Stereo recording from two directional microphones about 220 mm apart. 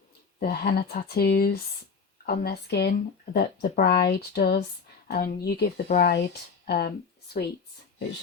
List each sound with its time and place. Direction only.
0.3 s speech: 45° left (ahead or behind)